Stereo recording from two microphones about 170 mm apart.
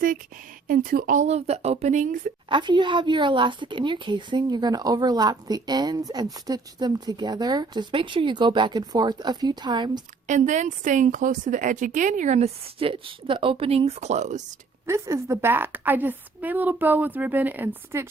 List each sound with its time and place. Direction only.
0.7 s a woman's voice: 55° right (ahead or behind)
2.5 s a woman's voice: 25° right (ahead or behind)
10.2 s a woman's voice: 45° right (ahead or behind)
14.8 s a woman's voice: 15° right (ahead or behind)